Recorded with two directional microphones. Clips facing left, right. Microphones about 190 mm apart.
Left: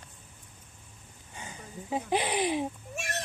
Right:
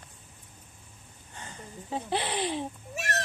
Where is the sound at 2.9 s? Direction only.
Centre (ahead or behind).